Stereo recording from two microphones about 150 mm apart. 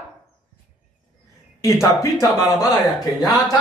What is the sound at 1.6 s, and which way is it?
Speech, 20° left (ahead or behind).